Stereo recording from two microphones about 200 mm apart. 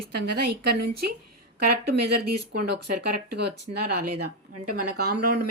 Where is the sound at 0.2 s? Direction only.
50° right (ahead or behind).